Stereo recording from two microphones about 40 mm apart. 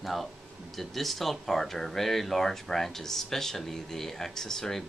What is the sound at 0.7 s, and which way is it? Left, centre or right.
Speech, centre.